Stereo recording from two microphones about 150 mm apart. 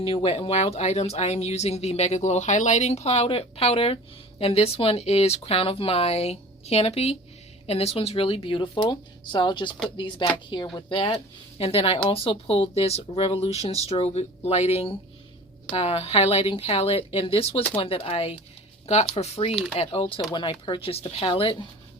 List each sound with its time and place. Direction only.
0.0 s speech: 40° left (ahead or behind)